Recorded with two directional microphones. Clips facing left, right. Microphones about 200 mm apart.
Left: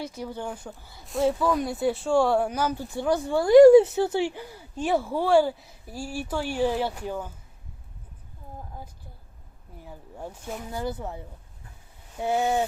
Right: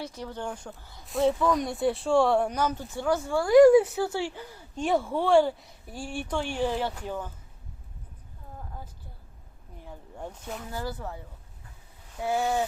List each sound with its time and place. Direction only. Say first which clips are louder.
0.0 s speech: left 2 dB; 10° left (ahead or behind)
4.7 s speech: left 1 dB; 5° left (ahead or behind)
9.8 s speech: left 1 dB; 5° left (ahead or behind)
10.7 s speech: left 4 dB; 20° left (ahead or behind)
12.2 s speech: left 2 dB; 20° left (ahead or behind)